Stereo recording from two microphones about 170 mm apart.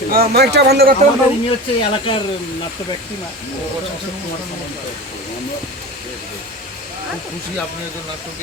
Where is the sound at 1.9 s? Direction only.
30° left (ahead or behind).